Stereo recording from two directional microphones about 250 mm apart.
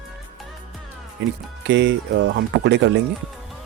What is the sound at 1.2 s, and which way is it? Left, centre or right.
Speech, right.